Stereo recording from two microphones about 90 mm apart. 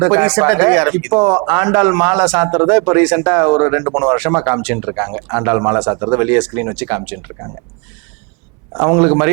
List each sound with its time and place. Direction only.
0.0 s speech: 15° right (ahead or behind)
8.7 s speech: 20° right (ahead or behind)